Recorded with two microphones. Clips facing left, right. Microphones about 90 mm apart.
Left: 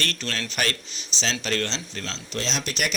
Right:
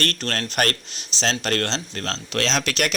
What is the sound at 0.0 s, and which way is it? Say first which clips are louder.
A man's voice: right 4 dB; 55° right (ahead or behind).